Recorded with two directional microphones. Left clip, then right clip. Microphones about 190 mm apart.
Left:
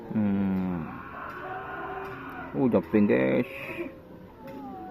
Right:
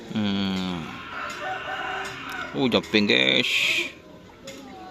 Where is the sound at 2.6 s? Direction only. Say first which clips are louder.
Right 2 dB; 15° right (ahead or behind).